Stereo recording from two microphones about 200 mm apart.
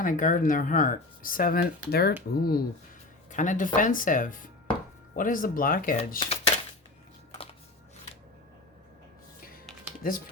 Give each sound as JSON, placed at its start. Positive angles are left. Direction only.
{"t": 0.0, "sound": "speech", "side_deg": 40}
{"t": 6.1, "sound": "speech", "side_deg": 30}
{"t": 10.0, "sound": "speech", "side_deg": 45}